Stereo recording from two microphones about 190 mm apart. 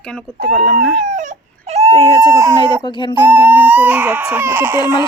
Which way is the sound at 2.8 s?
25° left (ahead or behind).